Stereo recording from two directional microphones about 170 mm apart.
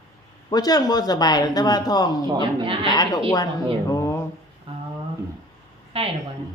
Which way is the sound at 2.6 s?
30° right (ahead or behind).